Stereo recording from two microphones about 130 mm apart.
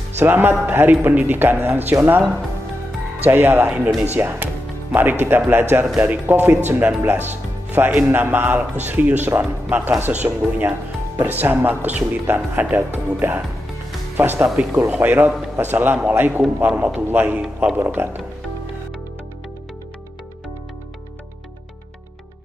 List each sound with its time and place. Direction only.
0.2 s speech: 15° right (ahead or behind)
3.3 s speech: 15° right (ahead or behind)
11.1 s speech: 15° right (ahead or behind)